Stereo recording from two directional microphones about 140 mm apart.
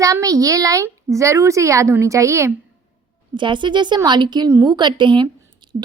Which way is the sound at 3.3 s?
35° right (ahead or behind).